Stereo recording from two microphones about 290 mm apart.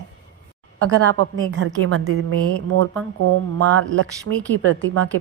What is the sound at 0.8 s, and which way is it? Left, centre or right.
A woman's voice, right.